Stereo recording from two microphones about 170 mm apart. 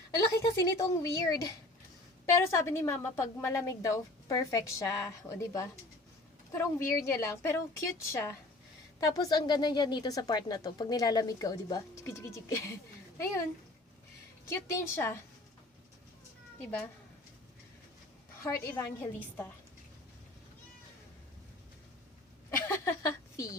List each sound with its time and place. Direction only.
0.2 s a woman's voice: 20° left (ahead or behind)
14.5 s a woman's voice: 15° left (ahead or behind)
16.6 s a woman's voice: 10° left (ahead or behind)
18.4 s a woman's voice: 15° left (ahead or behind)
22.4 s a sound: 15° left (ahead or behind)